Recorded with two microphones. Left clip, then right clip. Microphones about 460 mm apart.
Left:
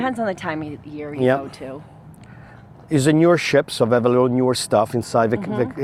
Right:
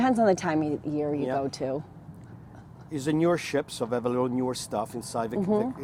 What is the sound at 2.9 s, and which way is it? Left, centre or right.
Speech, left.